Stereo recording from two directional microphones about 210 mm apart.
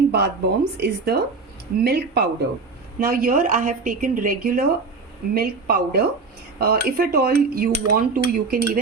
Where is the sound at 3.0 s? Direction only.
45° right (ahead or behind).